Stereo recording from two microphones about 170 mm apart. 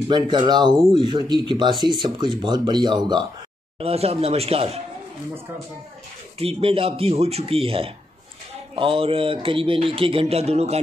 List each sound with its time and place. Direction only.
0.1 s speech: 25° right (ahead or behind)
3.8 s speech: 35° right (ahead or behind)
6.3 s speech: 35° right (ahead or behind)